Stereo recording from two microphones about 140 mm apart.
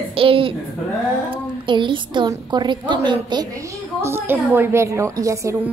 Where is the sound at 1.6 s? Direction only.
35° right (ahead or behind).